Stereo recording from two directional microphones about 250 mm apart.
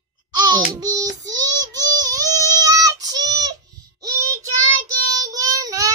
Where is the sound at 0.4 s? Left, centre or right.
Centre.